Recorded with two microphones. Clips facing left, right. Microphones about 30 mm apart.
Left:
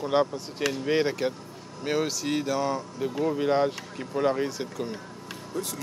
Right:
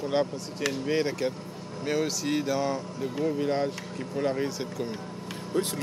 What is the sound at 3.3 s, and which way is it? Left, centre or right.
Speech, left.